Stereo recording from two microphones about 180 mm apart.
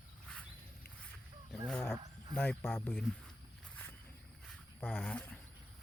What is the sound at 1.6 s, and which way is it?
Speech, 5° left (ahead or behind).